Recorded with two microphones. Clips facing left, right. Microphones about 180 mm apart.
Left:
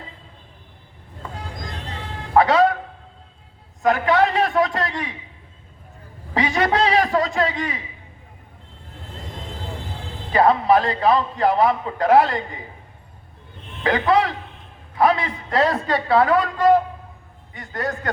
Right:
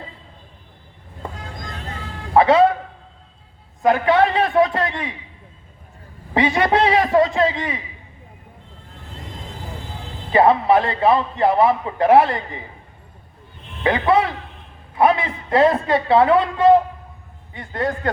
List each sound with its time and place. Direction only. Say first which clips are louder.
2.3 s a man's voice: right 2 dB; 25° right (ahead or behind)
3.8 s a man's voice: right 2 dB; 30° right (ahead or behind)
6.3 s a man's voice: right 3 dB; 25° right (ahead or behind)
10.3 s a man's voice: right 2 dB; 25° right (ahead or behind)
13.8 s a man's voice: right 1 dB; 25° right (ahead or behind)